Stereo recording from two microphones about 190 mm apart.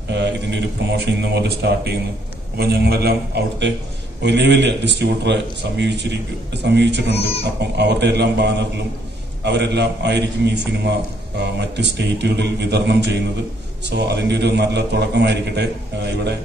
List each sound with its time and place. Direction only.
0.1 s a man's voice: 65° right (ahead or behind)